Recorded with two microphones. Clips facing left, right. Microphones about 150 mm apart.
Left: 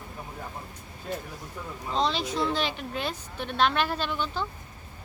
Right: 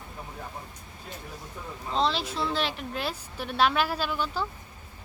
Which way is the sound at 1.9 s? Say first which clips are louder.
Even; centre (ahead or behind).